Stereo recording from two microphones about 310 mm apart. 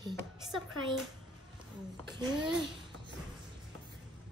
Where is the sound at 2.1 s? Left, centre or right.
Centre.